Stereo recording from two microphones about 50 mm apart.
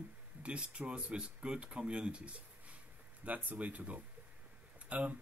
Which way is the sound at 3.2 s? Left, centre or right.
Right.